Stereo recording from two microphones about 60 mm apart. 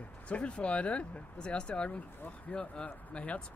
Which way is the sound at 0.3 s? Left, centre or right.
Centre.